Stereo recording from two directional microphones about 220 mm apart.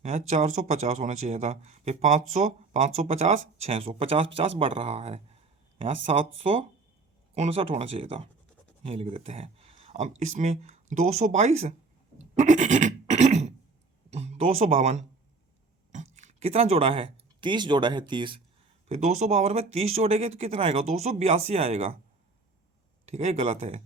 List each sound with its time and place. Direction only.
0.0 s speech: 30° right (ahead or behind)
6.4 s speech: 25° right (ahead or behind)
12.3 s a sound: 30° right (ahead or behind)
14.1 s speech: 30° right (ahead or behind)
23.0 s speech: 30° right (ahead or behind)